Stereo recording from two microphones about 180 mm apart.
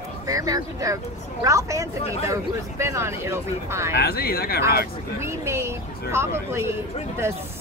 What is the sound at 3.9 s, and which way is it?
Speech, 60° left (ahead or behind).